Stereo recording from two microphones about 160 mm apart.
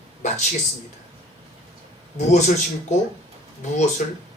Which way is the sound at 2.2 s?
45° left (ahead or behind).